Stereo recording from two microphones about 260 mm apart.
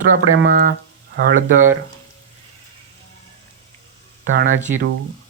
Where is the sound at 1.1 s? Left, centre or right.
Right.